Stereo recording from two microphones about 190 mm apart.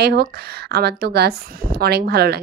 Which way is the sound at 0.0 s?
55° right (ahead or behind).